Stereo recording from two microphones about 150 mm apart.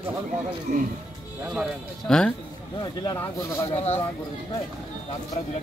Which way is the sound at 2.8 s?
25° left (ahead or behind).